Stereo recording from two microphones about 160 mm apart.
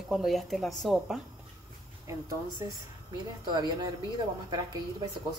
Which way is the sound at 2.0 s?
20° right (ahead or behind).